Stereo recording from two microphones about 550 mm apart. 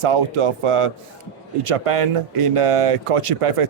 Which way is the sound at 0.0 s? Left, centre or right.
Right.